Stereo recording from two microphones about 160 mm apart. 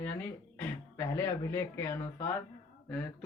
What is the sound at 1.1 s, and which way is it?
Speech, 15° left (ahead or behind).